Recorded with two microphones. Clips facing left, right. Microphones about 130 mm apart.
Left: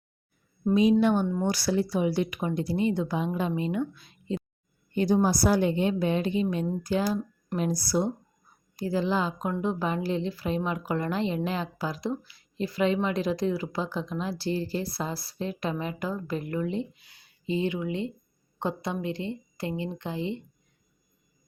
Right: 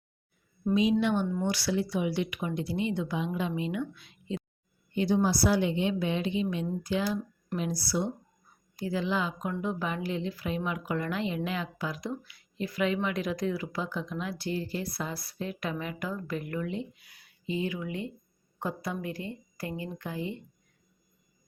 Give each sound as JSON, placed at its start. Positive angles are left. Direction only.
{"t": 0.7, "sound": "a woman's voice", "side_deg": 45}